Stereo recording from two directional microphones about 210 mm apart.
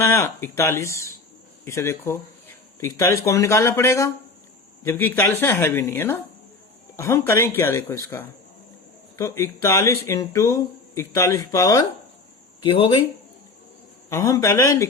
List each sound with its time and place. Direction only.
0.0 s speech: 15° left (ahead or behind)
9.1 s speech: 15° left (ahead or behind)
14.1 s speech: 15° left (ahead or behind)